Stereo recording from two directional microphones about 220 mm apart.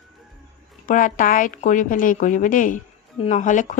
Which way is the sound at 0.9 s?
35° left (ahead or behind).